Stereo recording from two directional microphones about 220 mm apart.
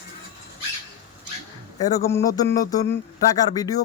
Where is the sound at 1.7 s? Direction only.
15° left (ahead or behind).